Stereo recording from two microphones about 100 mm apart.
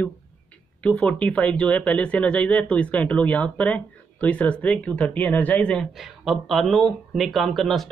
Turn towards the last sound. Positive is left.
turn(degrees=5)  # may be behind; listen again after turning